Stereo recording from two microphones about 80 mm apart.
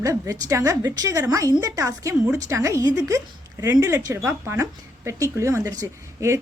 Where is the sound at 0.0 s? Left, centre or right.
Right.